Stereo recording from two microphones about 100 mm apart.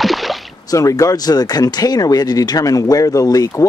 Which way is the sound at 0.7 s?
35° left (ahead or behind).